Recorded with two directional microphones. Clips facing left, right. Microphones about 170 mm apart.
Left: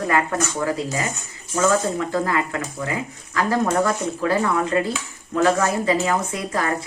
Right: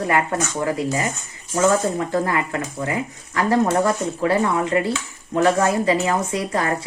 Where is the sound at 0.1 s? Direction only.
25° right (ahead or behind).